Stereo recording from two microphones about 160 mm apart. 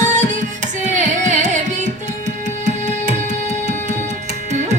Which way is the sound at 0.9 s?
50° right (ahead or behind).